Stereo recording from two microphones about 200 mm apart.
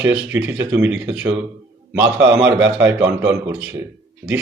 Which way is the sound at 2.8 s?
10° right (ahead or behind).